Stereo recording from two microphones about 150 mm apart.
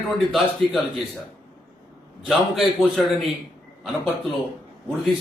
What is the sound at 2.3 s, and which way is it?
Speech, centre (ahead or behind).